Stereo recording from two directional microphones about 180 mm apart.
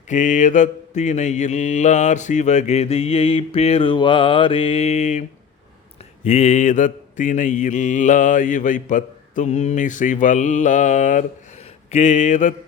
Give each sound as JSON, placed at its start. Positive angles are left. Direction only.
{"t": 0.1, "sound": "mantra", "side_deg": 45}
{"t": 6.2, "sound": "mantra", "side_deg": 40}